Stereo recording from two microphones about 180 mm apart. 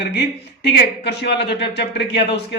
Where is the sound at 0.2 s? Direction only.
65° left (ahead or behind).